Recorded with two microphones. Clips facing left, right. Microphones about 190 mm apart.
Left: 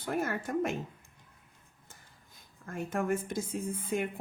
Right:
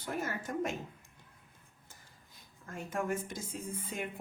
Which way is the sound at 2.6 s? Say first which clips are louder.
Left 4 dB; 55° left (ahead or behind).